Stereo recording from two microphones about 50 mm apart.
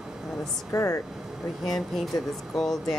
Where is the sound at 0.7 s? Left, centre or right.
Left.